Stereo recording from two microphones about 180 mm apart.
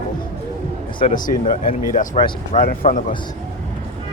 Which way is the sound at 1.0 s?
45° left (ahead or behind).